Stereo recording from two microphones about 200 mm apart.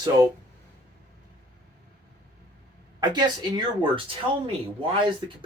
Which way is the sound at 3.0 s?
20° right (ahead or behind).